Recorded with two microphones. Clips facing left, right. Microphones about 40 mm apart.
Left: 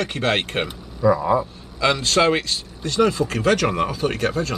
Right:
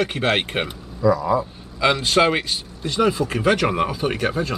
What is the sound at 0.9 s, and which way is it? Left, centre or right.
Speech, left.